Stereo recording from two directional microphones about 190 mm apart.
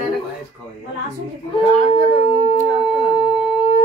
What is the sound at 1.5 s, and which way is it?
Speech, 35° left (ahead or behind).